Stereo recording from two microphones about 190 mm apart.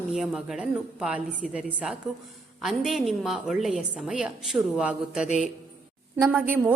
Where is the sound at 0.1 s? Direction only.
Centre (ahead or behind).